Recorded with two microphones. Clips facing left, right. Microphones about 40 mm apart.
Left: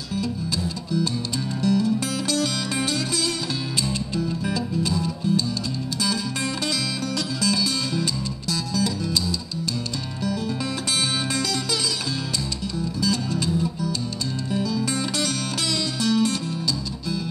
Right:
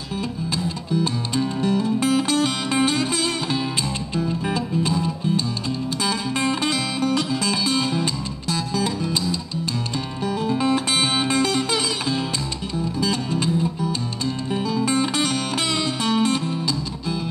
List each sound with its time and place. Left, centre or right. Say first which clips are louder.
0.9 s music: right 3 dB; right
4.3 s music: right 2 dB; right
10.2 s music: right 5 dB; right